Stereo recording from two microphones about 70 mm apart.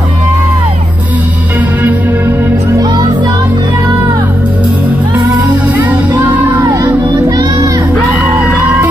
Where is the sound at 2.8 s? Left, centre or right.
Right.